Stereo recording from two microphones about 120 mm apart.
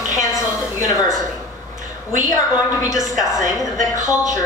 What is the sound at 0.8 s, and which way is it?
Speech, 30° left (ahead or behind).